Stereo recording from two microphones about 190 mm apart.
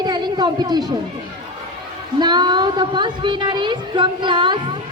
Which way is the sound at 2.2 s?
20° right (ahead or behind).